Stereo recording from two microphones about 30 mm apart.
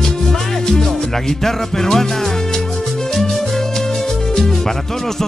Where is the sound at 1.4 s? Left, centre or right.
Centre.